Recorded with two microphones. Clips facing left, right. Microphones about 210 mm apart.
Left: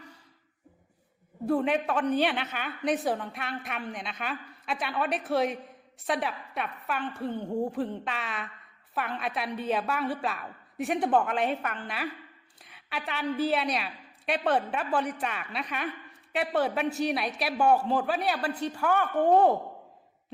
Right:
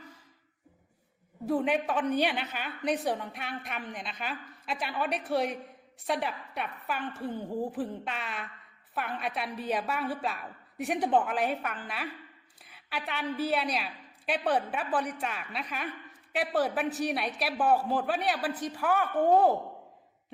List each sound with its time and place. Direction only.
1.7 s a woman's voice: centre (ahead or behind)